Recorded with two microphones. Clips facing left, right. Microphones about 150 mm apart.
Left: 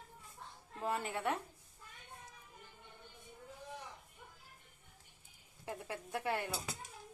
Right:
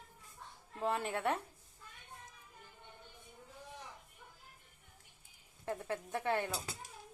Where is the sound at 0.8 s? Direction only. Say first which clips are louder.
Right 2 dB; centre (ahead or behind).